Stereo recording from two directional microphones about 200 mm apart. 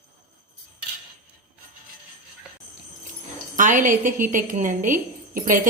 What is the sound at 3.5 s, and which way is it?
A woman's voice, 40° right (ahead or behind).